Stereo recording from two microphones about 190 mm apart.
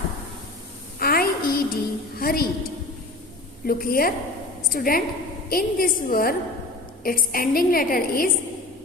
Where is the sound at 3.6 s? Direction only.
50° left (ahead or behind).